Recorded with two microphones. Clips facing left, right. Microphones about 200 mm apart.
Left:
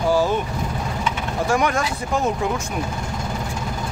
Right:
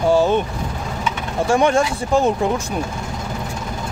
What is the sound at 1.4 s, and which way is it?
Speech, 30° right (ahead or behind).